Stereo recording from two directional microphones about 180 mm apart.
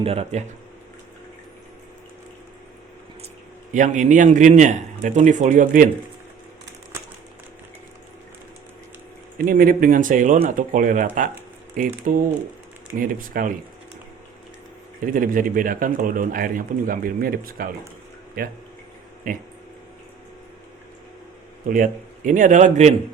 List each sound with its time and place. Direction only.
0.0 s speech: 35° right (ahead or behind)
3.7 s speech: 45° right (ahead or behind)
9.4 s speech: 50° right (ahead or behind)
15.0 s speech: 50° right (ahead or behind)
21.7 s speech: 45° right (ahead or behind)